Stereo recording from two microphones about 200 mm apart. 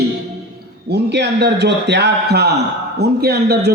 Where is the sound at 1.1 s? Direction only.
60° right (ahead or behind).